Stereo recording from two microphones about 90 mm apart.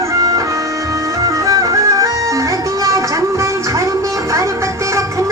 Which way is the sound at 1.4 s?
40° right (ahead or behind).